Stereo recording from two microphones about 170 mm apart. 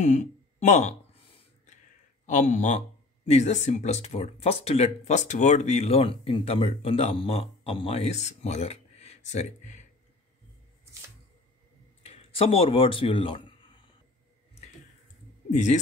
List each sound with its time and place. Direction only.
0.0 s speech: 45° left (ahead or behind)
2.2 s speech: 45° left (ahead or behind)
12.0 s a sound: 35° left (ahead or behind)
15.5 s speech: 45° left (ahead or behind)